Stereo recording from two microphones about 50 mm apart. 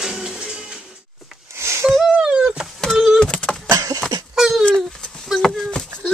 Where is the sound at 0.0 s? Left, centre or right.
Centre.